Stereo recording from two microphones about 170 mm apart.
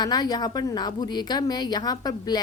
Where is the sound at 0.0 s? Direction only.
25° left (ahead or behind).